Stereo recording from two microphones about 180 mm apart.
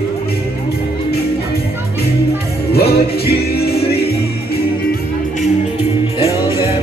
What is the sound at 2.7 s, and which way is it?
Music, 60° left (ahead or behind).